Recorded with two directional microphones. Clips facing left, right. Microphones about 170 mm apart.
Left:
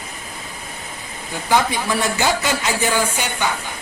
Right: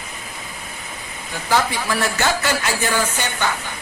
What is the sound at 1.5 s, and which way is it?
Speech, 15° left (ahead or behind).